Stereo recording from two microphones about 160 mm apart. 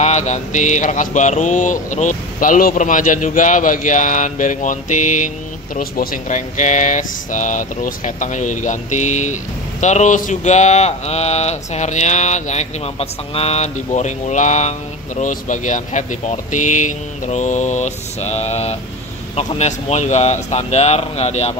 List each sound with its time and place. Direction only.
0.0 s speech: 45° left (ahead or behind)